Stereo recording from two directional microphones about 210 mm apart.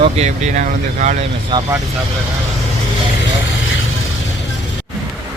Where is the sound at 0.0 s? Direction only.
30° right (ahead or behind).